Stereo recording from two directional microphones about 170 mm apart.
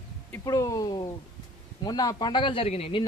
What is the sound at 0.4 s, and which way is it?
A man's voice, 20° left (ahead or behind).